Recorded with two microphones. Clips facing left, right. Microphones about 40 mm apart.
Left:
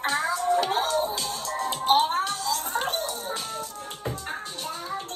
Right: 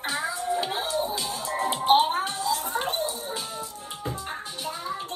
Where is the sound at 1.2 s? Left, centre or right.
Right.